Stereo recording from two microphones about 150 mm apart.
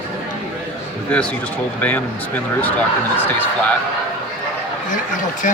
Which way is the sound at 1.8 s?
10° left (ahead or behind).